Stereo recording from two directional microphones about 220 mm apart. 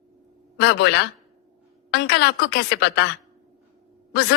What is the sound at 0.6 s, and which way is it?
A woman's voice, 50° left (ahead or behind).